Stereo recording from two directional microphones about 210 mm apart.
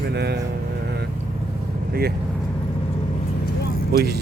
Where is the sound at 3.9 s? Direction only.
50° right (ahead or behind).